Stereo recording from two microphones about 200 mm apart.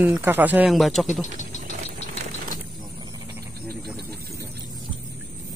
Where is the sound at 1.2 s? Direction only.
40° left (ahead or behind).